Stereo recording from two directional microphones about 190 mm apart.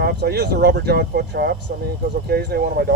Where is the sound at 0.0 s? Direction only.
60° right (ahead or behind).